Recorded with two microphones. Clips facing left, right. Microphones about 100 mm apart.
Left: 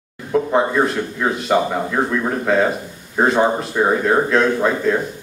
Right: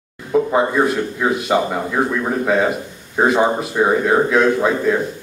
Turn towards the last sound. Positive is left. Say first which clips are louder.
# right 1 dB
turn(degrees=-5)  # may be behind; listen again after turning